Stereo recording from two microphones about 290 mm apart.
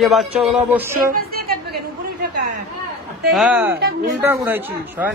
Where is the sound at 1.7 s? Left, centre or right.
Right.